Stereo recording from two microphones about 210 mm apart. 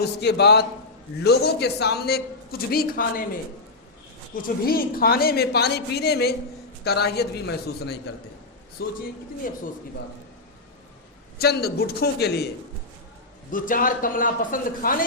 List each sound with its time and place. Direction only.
0.0 s a man's voice: 50° left (ahead or behind)
4.4 s a man's voice: 45° left (ahead or behind)
11.3 s a man's voice: 50° left (ahead or behind)
13.5 s a man's voice: 40° left (ahead or behind)